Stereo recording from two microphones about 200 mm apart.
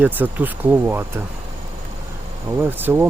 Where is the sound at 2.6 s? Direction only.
10° right (ahead or behind).